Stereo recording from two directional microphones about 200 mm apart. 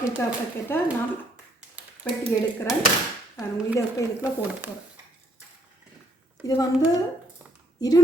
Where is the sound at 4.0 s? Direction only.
15° left (ahead or behind).